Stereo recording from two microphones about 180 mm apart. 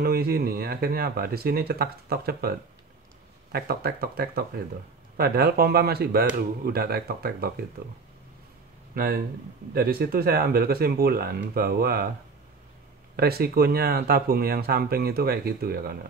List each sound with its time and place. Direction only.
0.0 s speech: 55° right (ahead or behind)
3.5 s speech: 60° right (ahead or behind)
8.9 s speech: 55° right (ahead or behind)
13.1 s speech: 60° right (ahead or behind)